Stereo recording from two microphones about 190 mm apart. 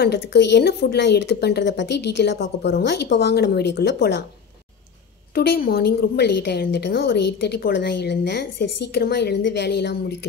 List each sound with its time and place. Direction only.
0.0 s a woman's voice: 65° left (ahead or behind)
5.3 s a woman's voice: 55° left (ahead or behind)